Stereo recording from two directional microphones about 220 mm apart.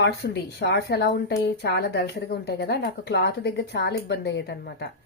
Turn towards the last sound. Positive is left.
turn(degrees=45)  # may be behind; listen again after turning